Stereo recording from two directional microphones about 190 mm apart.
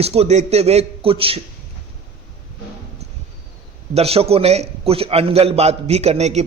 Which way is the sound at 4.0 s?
30° right (ahead or behind).